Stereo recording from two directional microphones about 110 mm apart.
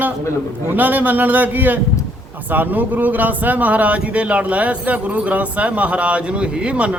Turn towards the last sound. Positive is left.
turn(degrees=-10)  # may be behind; listen again after turning